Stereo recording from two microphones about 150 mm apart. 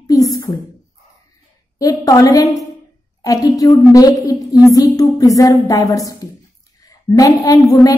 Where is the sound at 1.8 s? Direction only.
25° left (ahead or behind).